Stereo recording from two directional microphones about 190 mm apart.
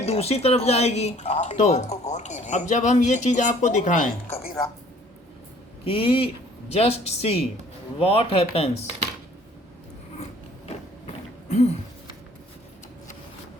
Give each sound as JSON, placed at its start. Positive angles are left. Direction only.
{"t": 0.0, "sound": "speech", "side_deg": 35}
{"t": 5.8, "sound": "speech", "side_deg": 30}
{"t": 11.0, "sound": "mechanisms", "side_deg": 35}